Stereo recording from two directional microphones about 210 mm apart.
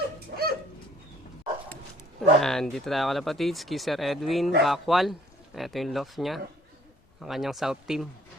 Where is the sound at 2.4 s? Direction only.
Centre (ahead or behind).